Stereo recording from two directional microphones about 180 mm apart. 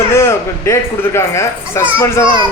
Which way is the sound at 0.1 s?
15° left (ahead or behind).